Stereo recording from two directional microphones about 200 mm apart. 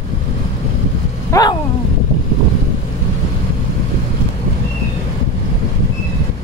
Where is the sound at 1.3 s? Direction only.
20° left (ahead or behind).